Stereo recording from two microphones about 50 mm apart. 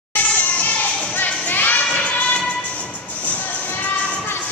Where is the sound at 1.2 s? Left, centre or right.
Left.